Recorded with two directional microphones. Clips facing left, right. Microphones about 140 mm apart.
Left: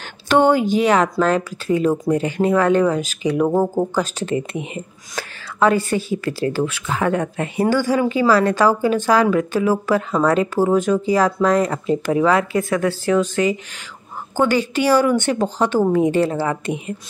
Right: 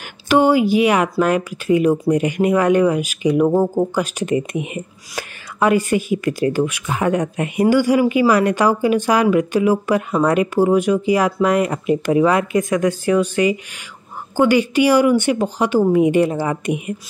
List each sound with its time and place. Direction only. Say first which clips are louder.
0.3 s speech: right 1 dB; 10° right (ahead or behind)